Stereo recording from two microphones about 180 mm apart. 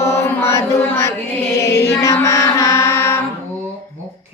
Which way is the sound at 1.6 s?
15° left (ahead or behind).